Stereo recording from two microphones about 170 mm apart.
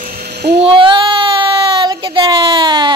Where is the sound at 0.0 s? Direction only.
70° right (ahead or behind).